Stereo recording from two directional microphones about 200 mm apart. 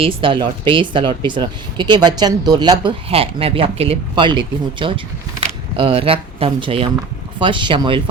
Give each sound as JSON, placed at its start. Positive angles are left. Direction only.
{"t": 0.0, "sound": "speech", "side_deg": -25}